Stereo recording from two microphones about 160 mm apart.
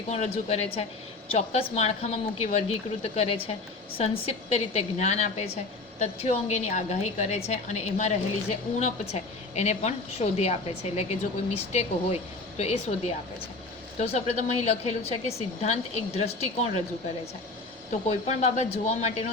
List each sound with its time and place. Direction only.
0.1 s a woman's voice: 40° left (ahead or behind)
17.9 s a woman's voice: 45° left (ahead or behind)